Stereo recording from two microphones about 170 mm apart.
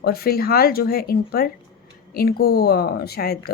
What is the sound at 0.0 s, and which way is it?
A woman's voice, 65° left (ahead or behind).